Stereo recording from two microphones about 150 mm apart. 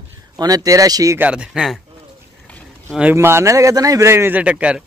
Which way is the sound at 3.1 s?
20° right (ahead or behind).